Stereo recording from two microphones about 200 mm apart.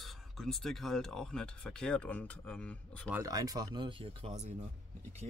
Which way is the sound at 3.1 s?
15° right (ahead or behind).